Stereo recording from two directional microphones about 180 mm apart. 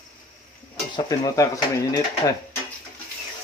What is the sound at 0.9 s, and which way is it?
Speech, 20° left (ahead or behind).